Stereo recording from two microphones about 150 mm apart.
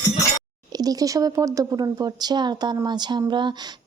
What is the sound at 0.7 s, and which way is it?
Speech, 25° right (ahead or behind).